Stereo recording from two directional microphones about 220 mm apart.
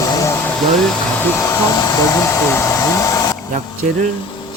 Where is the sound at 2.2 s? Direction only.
10° left (ahead or behind).